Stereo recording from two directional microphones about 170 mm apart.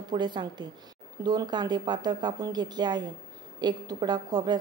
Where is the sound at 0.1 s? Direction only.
25° right (ahead or behind).